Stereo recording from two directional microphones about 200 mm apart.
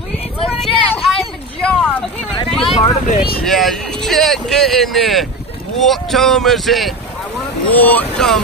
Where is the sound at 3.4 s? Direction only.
Centre (ahead or behind).